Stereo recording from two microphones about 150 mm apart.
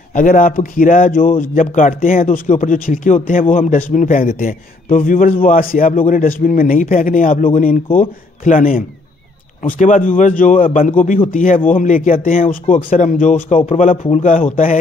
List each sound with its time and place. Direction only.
0.1 s speech: 65° left (ahead or behind)